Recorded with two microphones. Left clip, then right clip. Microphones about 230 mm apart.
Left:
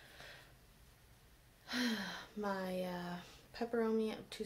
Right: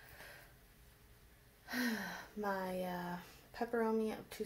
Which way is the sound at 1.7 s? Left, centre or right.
Centre.